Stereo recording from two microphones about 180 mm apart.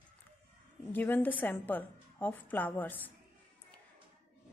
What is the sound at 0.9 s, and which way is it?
A woman's voice, 10° left (ahead or behind).